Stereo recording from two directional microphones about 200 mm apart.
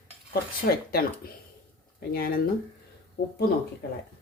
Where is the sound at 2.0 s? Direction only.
50° left (ahead or behind).